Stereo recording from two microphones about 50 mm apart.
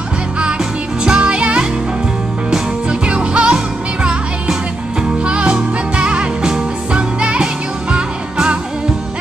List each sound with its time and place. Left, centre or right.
1.0 s music: right